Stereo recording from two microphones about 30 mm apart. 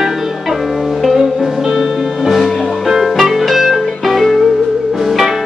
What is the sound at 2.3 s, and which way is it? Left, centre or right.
Music, centre.